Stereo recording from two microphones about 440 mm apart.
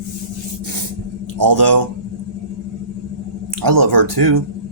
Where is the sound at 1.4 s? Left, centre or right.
Right.